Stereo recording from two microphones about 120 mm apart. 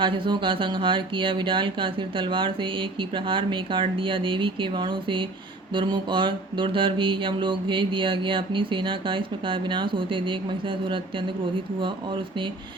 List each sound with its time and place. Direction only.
0.0 s speech: 45° right (ahead or behind)